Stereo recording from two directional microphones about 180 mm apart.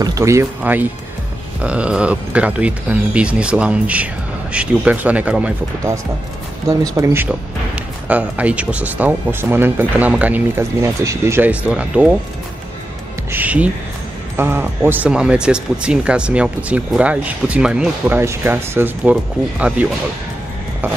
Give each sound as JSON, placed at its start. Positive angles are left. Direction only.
{"t": 0.0, "sound": "speech", "side_deg": -15}
{"t": 6.7, "sound": "speech", "side_deg": -20}
{"t": 13.3, "sound": "speech", "side_deg": -10}